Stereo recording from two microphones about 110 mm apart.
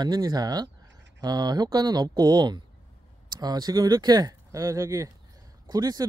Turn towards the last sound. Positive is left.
turn(degrees=-35)  # may be behind; listen again after turning